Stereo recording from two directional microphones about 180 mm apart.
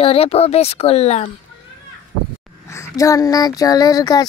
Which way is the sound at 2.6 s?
15° left (ahead or behind).